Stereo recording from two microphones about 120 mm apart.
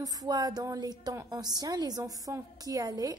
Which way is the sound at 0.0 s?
30° right (ahead or behind).